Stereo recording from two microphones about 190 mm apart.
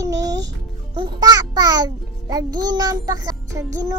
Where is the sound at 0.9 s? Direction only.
20° right (ahead or behind).